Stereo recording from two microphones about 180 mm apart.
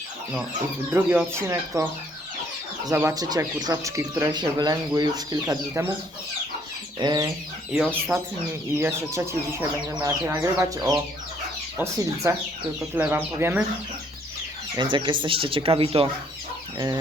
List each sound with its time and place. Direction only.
0.9 s speech: 10° right (ahead or behind)
7.0 s speech: 25° right (ahead or behind)
7.7 s speech: centre (ahead or behind)
8.7 s speech: 15° right (ahead or behind)
14.8 s speech: 25° right (ahead or behind)
16.7 s chicken: 25° right (ahead or behind)